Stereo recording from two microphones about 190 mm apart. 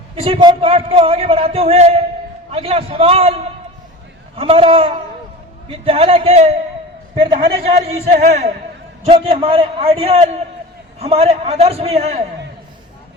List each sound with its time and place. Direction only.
0.2 s a man's voice: 30° right (ahead or behind)
4.4 s a man's voice: 30° right (ahead or behind)